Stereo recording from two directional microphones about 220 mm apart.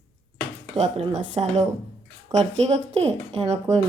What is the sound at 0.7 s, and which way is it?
Speech, 30° right (ahead or behind).